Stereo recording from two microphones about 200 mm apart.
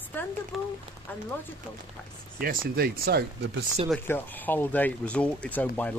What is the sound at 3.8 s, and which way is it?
Speech, 5° left (ahead or behind).